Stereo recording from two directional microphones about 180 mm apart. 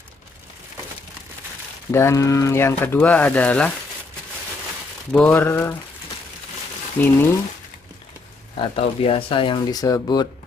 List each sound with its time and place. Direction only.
1.9 s speech: 15° left (ahead or behind)
5.1 s speech: 10° left (ahead or behind)
7.0 s speech: 10° left (ahead or behind)
8.5 s speech: 30° left (ahead or behind)